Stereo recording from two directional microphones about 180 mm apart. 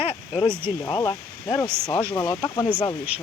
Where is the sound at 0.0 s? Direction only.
30° left (ahead or behind).